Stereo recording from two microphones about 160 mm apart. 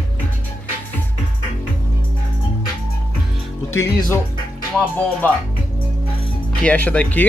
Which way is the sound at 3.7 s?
20° left (ahead or behind).